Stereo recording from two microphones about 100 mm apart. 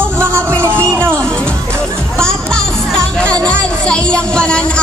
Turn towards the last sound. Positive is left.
turn(degrees=10)  # may be behind; listen again after turning